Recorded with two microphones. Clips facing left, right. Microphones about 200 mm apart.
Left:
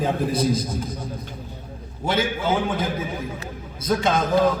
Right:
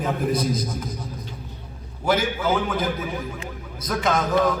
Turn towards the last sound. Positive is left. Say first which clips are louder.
# left 1 dB
turn(degrees=25)  # may be behind; listen again after turning